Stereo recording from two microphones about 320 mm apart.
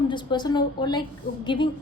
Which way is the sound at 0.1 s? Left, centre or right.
Centre.